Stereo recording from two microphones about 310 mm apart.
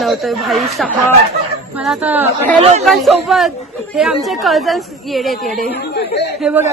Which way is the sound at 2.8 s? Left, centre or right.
Centre.